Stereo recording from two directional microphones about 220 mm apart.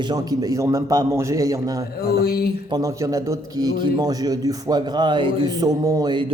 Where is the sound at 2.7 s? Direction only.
15° right (ahead or behind).